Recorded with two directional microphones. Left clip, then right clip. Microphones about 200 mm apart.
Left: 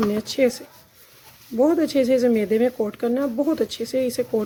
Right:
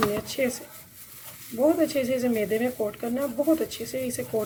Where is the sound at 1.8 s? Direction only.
50° left (ahead or behind).